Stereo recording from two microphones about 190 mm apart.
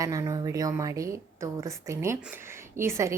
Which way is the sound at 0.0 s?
20° right (ahead or behind).